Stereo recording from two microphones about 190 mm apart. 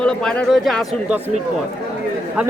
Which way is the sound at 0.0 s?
5° left (ahead or behind).